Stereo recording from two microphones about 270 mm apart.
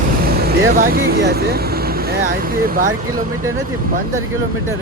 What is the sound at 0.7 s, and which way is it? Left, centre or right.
Speech, right.